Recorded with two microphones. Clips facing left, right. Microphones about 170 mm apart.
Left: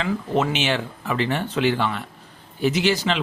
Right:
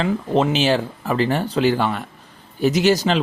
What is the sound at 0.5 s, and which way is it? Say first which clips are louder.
Speech: right 5 dB; 35° right (ahead or behind).